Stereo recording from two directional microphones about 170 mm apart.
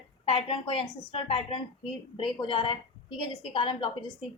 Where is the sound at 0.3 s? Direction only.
35° left (ahead or behind).